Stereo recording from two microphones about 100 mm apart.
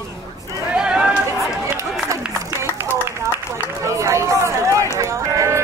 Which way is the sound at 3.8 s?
30° right (ahead or behind).